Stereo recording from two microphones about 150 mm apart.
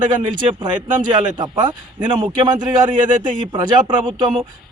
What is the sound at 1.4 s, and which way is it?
A man's voice, 30° right (ahead or behind).